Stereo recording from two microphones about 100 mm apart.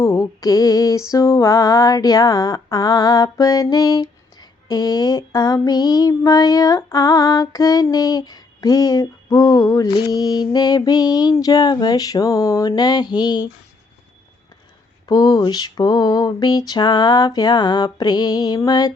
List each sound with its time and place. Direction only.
0.0 s music: 30° left (ahead or behind)
1.1 s a sound: 35° left (ahead or behind)
15.0 s mantra: 40° left (ahead or behind)